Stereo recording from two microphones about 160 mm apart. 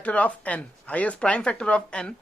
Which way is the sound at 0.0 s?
10° left (ahead or behind).